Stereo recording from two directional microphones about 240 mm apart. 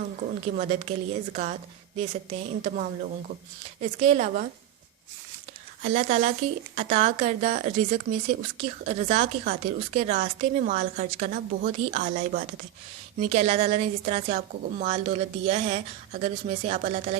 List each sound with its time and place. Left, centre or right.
0.5 s a woman's voice: right
5.8 s a woman's voice: right